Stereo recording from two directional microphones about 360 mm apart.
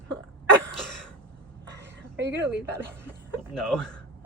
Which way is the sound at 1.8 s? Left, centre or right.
Right.